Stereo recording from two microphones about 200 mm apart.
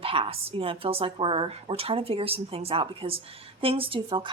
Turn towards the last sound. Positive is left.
turn(degrees=-25)  # may be behind; listen again after turning